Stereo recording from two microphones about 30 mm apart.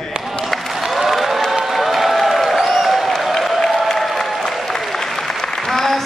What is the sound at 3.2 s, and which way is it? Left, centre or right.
Applause, centre.